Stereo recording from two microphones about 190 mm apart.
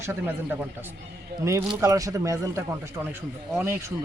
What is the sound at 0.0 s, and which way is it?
A man's voice, 10° right (ahead or behind).